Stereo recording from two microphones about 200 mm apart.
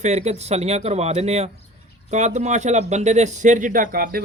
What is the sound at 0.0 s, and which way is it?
Speech, 35° right (ahead or behind).